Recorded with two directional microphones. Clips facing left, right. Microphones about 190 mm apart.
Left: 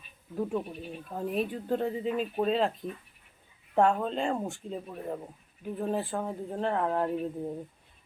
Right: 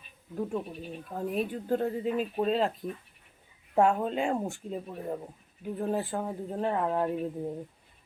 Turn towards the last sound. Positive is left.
turn(degrees=-5)  # may be behind; listen again after turning